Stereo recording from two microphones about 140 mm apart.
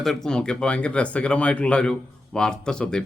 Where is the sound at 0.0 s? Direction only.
5° left (ahead or behind).